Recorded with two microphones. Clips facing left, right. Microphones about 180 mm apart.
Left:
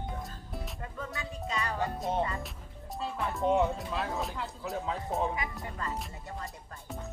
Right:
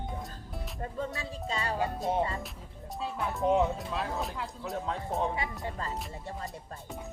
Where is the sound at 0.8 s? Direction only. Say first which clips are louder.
Right 7 dB; 30° right (ahead or behind).